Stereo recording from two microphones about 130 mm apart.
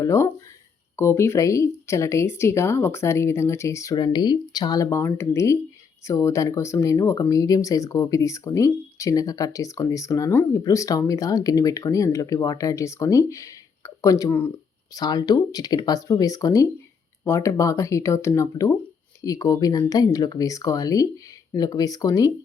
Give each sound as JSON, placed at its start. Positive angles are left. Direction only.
{"t": 0.0, "sound": "speech", "side_deg": 25}
{"t": 3.9, "sound": "speech", "side_deg": 35}
{"t": 14.9, "sound": "speech", "side_deg": 30}